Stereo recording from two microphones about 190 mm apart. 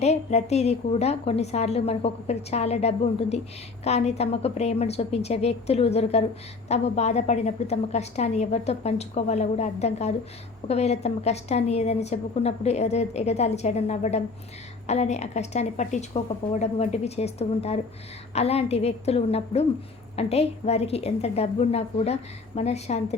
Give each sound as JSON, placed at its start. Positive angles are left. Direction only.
{"t": 0.0, "sound": "a woman's voice", "side_deg": 35}